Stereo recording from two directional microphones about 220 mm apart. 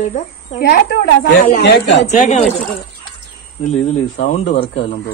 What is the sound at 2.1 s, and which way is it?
Speech, 30° left (ahead or behind).